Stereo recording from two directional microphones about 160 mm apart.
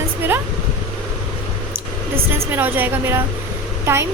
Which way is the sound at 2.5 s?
10° right (ahead or behind).